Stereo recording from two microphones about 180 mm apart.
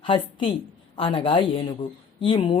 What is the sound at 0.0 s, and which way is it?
A woman's voice, 30° left (ahead or behind).